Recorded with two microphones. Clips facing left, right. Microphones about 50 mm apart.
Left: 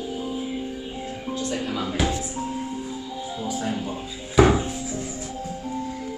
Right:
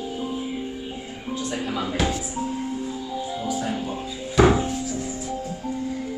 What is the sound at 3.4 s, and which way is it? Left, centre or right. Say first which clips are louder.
Music: left 1 dB; centre.